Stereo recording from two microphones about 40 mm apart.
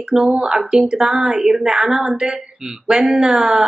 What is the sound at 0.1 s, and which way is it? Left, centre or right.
Speech, centre.